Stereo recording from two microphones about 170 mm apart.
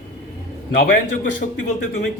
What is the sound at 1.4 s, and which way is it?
Speech, 50° left (ahead or behind).